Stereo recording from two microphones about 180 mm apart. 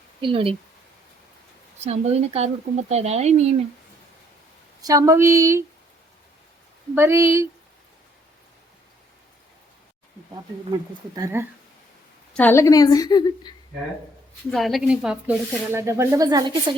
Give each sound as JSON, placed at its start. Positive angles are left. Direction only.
{"t": 0.2, "sound": "speech", "side_deg": -30}
{"t": 1.8, "sound": "speech", "side_deg": -35}
{"t": 4.8, "sound": "speech", "side_deg": -20}
{"t": 6.9, "sound": "speech", "side_deg": -15}
{"t": 11.1, "sound": "speech", "side_deg": -15}
{"t": 12.3, "sound": "a woman's voice", "side_deg": 10}
{"t": 14.5, "sound": "speech", "side_deg": 0}